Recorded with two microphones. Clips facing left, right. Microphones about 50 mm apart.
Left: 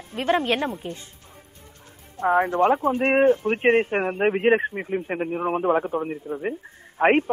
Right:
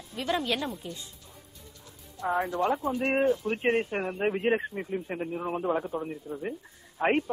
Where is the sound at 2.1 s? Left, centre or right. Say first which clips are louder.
Left 8 dB; left.